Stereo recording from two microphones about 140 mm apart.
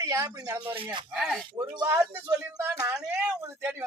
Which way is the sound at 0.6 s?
40° right (ahead or behind).